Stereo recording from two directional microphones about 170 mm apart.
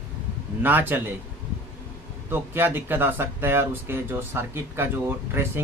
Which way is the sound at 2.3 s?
10° right (ahead or behind).